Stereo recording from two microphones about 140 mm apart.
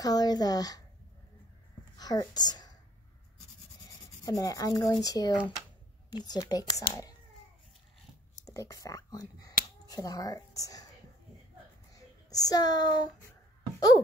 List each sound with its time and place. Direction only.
0.0 s speech: 25° left (ahead or behind)
2.0 s speech: 30° left (ahead or behind)
4.2 s speech: 25° left (ahead or behind)
8.5 s a woman's voice: 20° left (ahead or behind)
11.9 s a sound: 25° left (ahead or behind)
13.7 s a child's voice: 25° left (ahead or behind)